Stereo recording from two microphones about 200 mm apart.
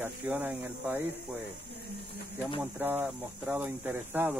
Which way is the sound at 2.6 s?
10° right (ahead or behind).